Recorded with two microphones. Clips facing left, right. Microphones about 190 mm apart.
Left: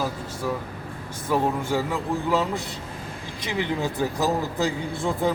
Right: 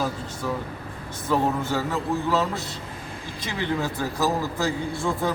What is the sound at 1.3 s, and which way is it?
A man's voice, 15° left (ahead or behind).